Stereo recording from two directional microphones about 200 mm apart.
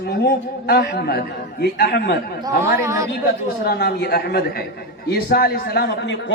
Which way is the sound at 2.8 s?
15° right (ahead or behind).